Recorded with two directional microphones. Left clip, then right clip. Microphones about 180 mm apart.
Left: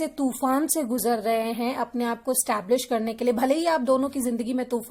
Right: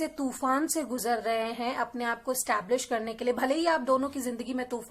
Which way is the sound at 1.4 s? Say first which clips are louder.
Left 4 dB; 55° left (ahead or behind).